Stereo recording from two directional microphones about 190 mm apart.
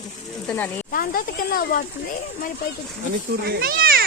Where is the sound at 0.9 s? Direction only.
50° left (ahead or behind).